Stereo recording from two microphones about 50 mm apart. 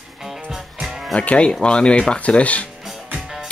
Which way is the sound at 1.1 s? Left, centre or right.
Left.